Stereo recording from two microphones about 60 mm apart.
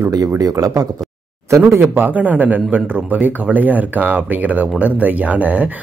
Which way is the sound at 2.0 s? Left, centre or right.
Right.